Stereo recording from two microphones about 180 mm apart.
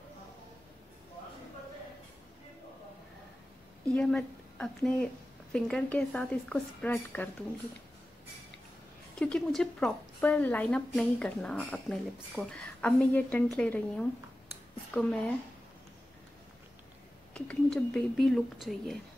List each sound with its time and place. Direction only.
3.9 s speech: 5° left (ahead or behind)
9.2 s a woman's voice: 5° left (ahead or behind)
17.3 s a woman's voice: 5° left (ahead or behind)